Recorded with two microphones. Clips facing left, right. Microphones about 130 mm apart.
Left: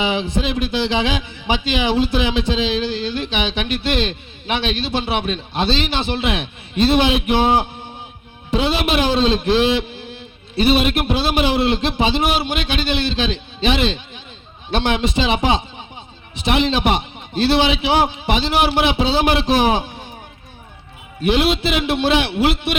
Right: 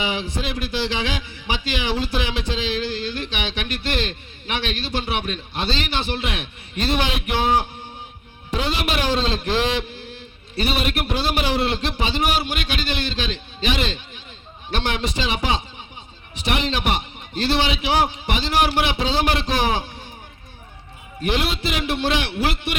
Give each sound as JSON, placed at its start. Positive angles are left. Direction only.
{"t": 0.0, "sound": "a man's voice", "side_deg": 20}
{"t": 21.2, "sound": "a man's voice", "side_deg": 20}